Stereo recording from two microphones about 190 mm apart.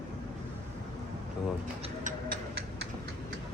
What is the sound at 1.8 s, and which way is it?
Music, 40° right (ahead or behind).